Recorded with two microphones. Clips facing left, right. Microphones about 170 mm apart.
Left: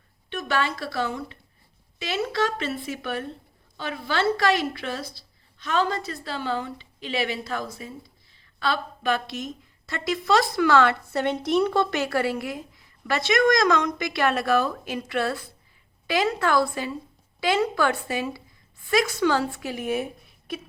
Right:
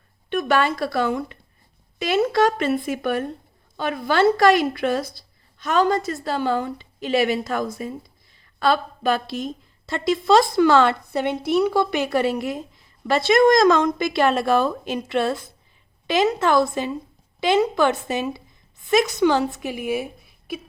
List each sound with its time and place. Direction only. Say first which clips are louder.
0.3 s a woman's voice: right 6 dB; 50° right (ahead or behind); by 10.9 s 25° right (ahead or behind)
11.1 s a woman's voice: right 2 dB; 10° right (ahead or behind)